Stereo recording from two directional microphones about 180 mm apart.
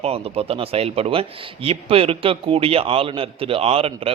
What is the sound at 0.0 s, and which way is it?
A man's voice, 35° right (ahead or behind).